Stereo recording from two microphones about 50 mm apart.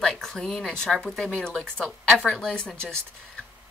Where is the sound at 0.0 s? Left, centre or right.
Centre.